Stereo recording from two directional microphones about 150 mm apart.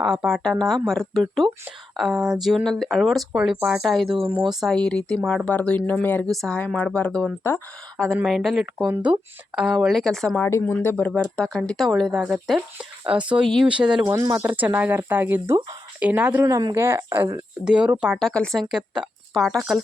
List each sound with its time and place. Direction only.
0.0 s speech: 5° right (ahead or behind)
14.0 s speech: 20° right (ahead or behind)
14.6 s speech: 10° right (ahead or behind)
17.7 s speech: 5° right (ahead or behind)